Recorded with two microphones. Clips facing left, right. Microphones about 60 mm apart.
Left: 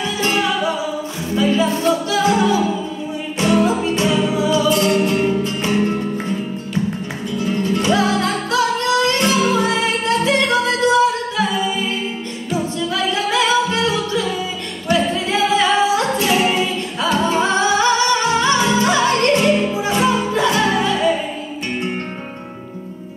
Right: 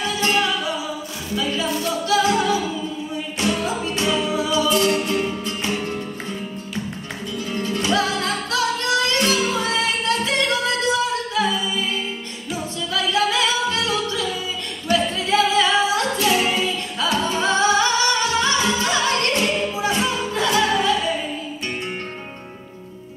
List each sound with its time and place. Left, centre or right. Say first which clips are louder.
0.2 s music: left 3 dB; left
7.4 s music: left 5 dB; left
12.9 s music: even; left
15.0 s singing: left 1 dB; left